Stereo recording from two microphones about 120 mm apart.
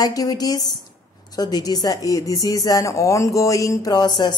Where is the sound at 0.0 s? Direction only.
30° left (ahead or behind).